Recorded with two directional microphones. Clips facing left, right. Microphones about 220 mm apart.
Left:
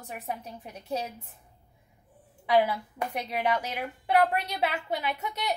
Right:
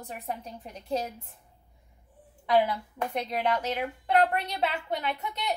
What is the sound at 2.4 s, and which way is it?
A woman's voice, 10° left (ahead or behind).